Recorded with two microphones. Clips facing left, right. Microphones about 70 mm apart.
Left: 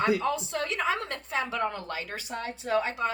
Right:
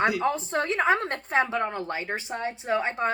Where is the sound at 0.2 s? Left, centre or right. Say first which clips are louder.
Right 3 dB; right.